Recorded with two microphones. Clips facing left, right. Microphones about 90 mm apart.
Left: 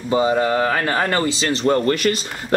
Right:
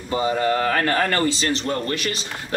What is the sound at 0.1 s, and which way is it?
Speech, 20° left (ahead or behind).